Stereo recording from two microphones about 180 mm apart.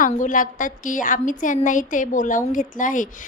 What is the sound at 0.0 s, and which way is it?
A woman's voice, 50° left (ahead or behind).